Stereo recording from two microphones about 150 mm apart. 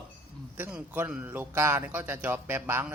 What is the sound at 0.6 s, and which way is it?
Speech, 15° right (ahead or behind).